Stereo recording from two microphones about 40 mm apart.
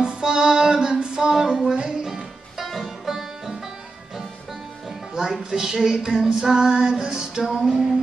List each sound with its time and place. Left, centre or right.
0.0 s music: centre
2.6 s music: centre
5.1 s female singing: centre